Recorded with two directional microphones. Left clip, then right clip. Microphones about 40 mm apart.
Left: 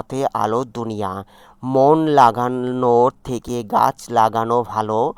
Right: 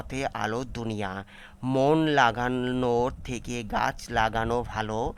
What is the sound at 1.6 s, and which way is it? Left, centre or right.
Speech, right.